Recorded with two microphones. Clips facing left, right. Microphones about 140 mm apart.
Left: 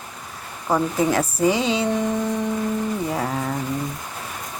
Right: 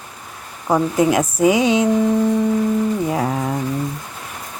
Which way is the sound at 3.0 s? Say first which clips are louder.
Right 4 dB; 10° right (ahead or behind).